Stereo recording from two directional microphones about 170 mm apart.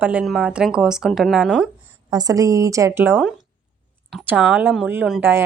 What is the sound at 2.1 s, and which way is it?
A woman's voice, 20° right (ahead or behind).